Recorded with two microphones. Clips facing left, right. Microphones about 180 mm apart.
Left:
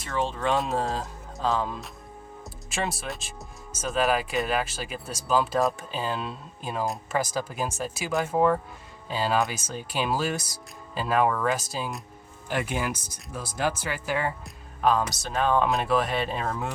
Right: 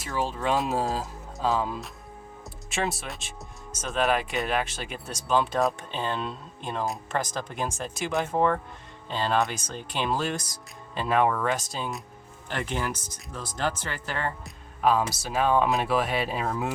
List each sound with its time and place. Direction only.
0.0 s speech: 5° right (ahead or behind)
14.4 s music: centre (ahead or behind)
15.1 s speech: 5° right (ahead or behind)